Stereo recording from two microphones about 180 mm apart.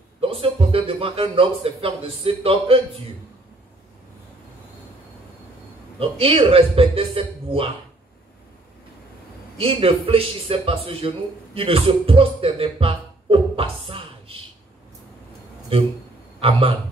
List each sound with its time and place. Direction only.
0.2 s speech: 30° right (ahead or behind)
5.9 s speech: 30° right (ahead or behind)
9.6 s a man's voice: 30° right (ahead or behind)
16.3 s a man's voice: 30° right (ahead or behind)